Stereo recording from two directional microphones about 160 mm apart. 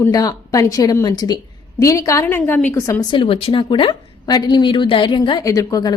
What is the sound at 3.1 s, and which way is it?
A woman's voice, 35° left (ahead or behind).